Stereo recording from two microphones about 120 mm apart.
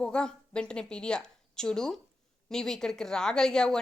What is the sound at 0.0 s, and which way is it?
A woman's voice, 5° left (ahead or behind).